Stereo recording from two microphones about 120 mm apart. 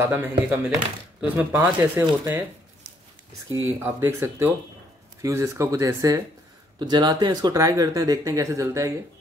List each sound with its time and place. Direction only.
0.0 s speech: 20° right (ahead or behind)
3.4 s speech: 20° right (ahead or behind)
6.8 s speech: 40° right (ahead or behind)